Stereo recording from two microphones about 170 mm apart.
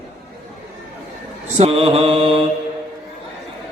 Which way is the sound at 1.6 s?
35° right (ahead or behind).